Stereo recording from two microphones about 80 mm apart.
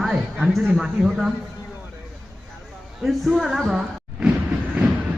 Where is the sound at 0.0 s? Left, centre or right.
Centre.